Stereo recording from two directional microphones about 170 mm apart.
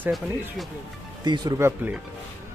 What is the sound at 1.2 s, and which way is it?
Speech, 25° right (ahead or behind).